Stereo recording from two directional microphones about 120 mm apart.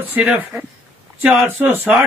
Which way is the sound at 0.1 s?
15° right (ahead or behind).